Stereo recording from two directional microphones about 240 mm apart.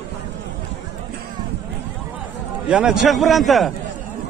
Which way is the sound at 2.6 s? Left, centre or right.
Centre.